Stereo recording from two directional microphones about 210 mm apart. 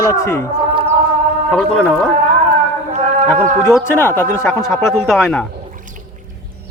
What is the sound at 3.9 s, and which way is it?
Speech, 10° left (ahead or behind).